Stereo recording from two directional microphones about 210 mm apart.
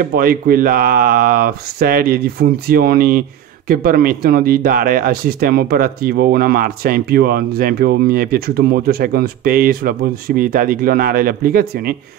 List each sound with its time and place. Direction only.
0.0 s speech: 45° right (ahead or behind)